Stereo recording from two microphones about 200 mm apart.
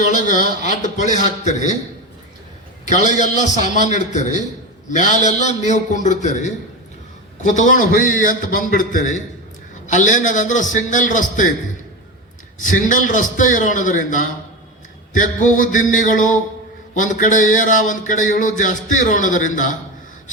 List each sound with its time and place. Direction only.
0.1 s speech: 40° left (ahead or behind)
2.8 s speech: 40° left (ahead or behind)
12.5 s speech: 40° left (ahead or behind)